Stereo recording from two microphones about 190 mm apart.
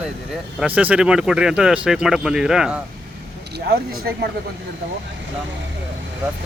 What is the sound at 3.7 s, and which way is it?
Speech, 50° right (ahead or behind).